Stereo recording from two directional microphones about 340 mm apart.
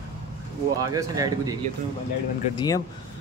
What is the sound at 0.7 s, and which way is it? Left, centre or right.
Speech, centre.